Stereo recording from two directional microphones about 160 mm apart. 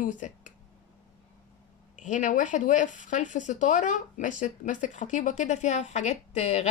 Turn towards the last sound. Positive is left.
turn(degrees=45)  # may be behind; listen again after turning